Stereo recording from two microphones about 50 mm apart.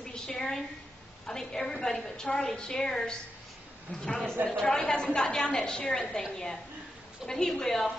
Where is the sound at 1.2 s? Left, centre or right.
Centre.